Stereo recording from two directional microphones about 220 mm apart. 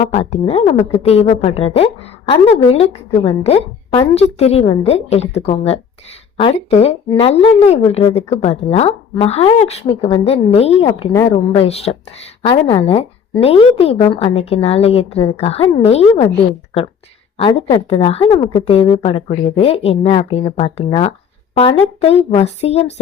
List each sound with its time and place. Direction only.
0.1 s a woman's voice: 30° left (ahead or behind)
17.3 s a woman's voice: 25° left (ahead or behind)